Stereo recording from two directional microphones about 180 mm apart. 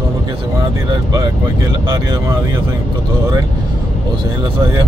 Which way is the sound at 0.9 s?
20° right (ahead or behind).